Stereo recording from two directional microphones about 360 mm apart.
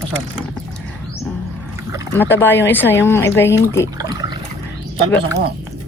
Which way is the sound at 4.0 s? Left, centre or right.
Centre.